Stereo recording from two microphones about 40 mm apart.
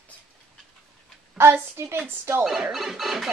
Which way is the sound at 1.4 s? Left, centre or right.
Right.